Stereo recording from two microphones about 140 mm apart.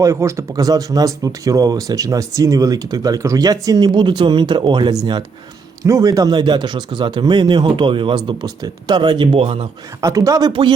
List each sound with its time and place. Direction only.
0.0 s speech: 20° right (ahead or behind)
5.8 s speech: 25° right (ahead or behind); by 9.6 s 45° right (ahead or behind)
10.0 s speech: 25° right (ahead or behind)